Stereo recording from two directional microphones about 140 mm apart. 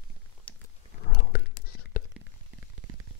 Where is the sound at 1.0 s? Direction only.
90° left.